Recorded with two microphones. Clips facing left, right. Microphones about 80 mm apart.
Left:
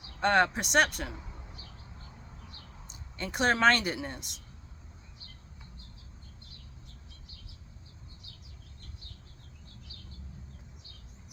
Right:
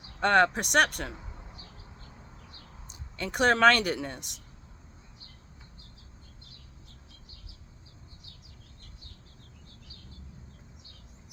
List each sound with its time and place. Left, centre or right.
0.2 s speech: right
2.8 s speech: right